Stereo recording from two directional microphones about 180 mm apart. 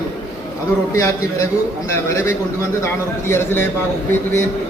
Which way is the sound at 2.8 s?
15° left (ahead or behind).